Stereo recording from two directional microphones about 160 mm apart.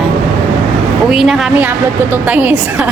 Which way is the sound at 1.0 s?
5° right (ahead or behind).